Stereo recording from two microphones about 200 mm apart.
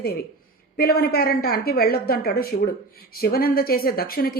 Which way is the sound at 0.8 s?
50° left (ahead or behind).